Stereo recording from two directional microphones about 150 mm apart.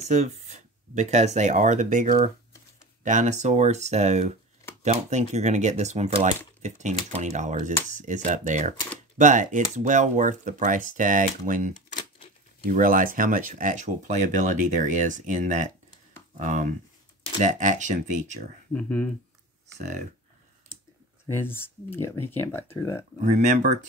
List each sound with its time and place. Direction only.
0.0 s speech: 50° right (ahead or behind)
18.7 s speech: 10° left (ahead or behind)
21.3 s speech: 15° left (ahead or behind)
23.2 s speech: 55° right (ahead or behind)